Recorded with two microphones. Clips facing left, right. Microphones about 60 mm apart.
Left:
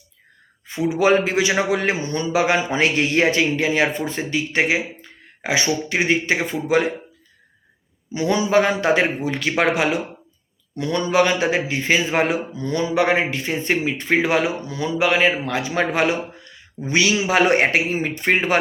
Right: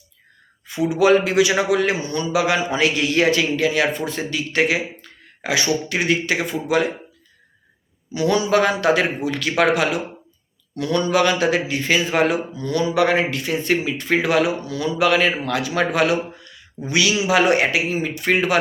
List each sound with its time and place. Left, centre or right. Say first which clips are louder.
0.7 s a man's voice: right 1 dB; left
8.1 s a man's voice: even; left